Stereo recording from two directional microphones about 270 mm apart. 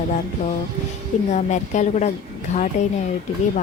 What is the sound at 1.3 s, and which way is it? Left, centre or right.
A woman's voice, left.